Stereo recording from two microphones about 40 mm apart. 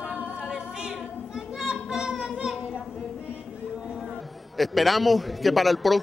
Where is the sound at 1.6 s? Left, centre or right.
Centre.